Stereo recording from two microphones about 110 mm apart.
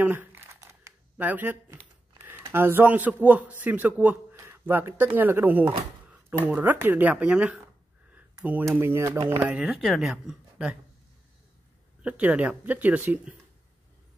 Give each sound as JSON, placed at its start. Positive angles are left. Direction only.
{"t": 0.0, "sound": "a sound", "side_deg": -15}
{"t": 0.6, "sound": "a sound", "side_deg": -30}
{"t": 1.1, "sound": "a man's voice", "side_deg": -15}
{"t": 8.7, "sound": "speech", "side_deg": -20}
{"t": 9.4, "sound": "a woman's voice", "side_deg": -10}
{"t": 12.0, "sound": "speech", "side_deg": -10}